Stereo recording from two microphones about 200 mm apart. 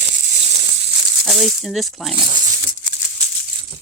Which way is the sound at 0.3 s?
35° right (ahead or behind).